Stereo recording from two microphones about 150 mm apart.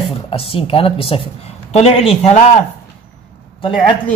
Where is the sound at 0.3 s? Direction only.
40° left (ahead or behind).